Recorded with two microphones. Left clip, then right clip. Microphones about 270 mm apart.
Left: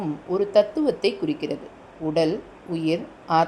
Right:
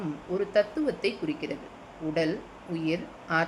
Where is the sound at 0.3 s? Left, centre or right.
Centre.